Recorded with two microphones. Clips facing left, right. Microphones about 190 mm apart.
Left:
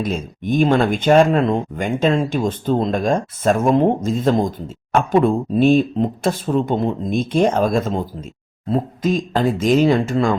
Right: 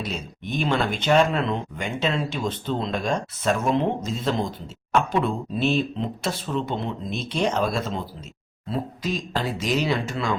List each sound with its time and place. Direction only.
0.0 s speech: 50° left (ahead or behind)